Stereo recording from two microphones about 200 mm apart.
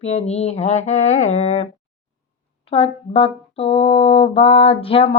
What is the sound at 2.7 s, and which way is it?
Speech, 30° left (ahead or behind).